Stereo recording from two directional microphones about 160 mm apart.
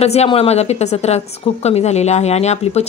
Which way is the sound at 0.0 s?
40° left (ahead or behind).